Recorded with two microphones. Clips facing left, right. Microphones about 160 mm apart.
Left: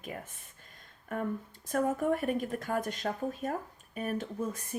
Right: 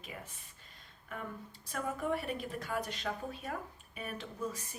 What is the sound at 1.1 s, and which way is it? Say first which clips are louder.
Speech: left 9 dB; 50° left (ahead or behind).